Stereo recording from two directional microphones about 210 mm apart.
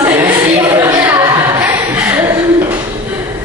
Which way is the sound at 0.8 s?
10° right (ahead or behind).